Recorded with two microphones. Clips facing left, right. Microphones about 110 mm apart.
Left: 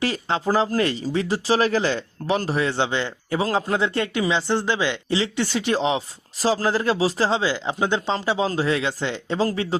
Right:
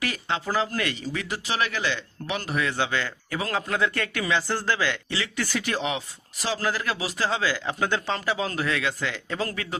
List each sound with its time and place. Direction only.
0.0 s speech: 30° left (ahead or behind)